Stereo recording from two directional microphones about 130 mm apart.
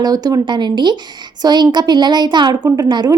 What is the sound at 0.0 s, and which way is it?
A woman's voice, 30° right (ahead or behind).